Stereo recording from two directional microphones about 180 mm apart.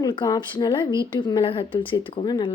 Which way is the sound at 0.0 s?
25° left (ahead or behind).